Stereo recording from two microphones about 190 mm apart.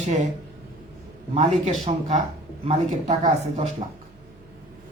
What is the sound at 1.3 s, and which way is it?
Speech, 40° right (ahead or behind).